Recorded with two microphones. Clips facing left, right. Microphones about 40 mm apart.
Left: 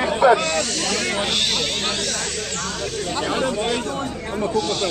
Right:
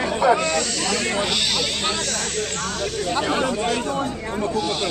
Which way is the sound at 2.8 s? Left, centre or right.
Centre.